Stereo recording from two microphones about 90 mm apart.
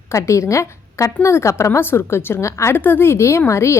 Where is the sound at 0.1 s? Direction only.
35° left (ahead or behind).